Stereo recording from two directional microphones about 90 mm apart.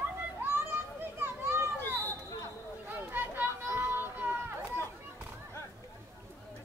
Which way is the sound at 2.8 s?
20° right (ahead or behind).